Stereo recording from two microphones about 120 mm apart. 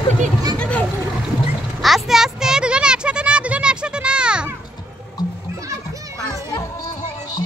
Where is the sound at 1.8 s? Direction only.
Centre (ahead or behind).